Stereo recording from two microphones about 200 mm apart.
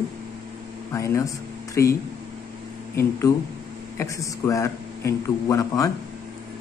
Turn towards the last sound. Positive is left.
turn(degrees=15)  # may be behind; listen again after turning